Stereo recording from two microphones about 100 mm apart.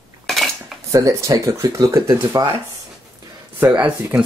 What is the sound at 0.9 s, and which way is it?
Speech, 35° right (ahead or behind).